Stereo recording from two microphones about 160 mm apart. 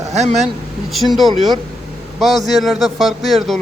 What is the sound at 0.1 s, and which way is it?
Speech, 45° right (ahead or behind).